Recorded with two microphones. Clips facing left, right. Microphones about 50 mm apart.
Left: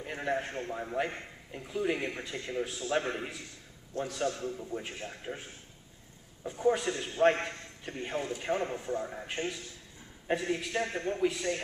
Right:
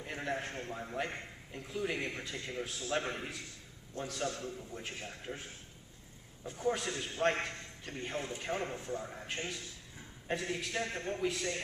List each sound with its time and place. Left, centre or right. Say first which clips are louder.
0.0 s a man's voice: left 5 dB; centre
4.4 s a man's voice: left 6 dB; left
6.4 s a man's voice: left 6 dB; centre